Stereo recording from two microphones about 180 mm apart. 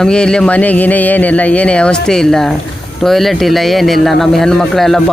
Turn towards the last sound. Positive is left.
turn(degrees=0)  # may be behind; listen again after turning